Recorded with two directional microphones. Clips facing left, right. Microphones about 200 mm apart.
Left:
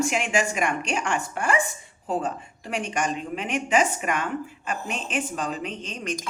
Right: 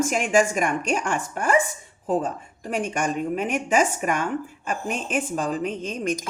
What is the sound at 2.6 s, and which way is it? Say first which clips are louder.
Speech: right 2 dB; 45° right (ahead or behind).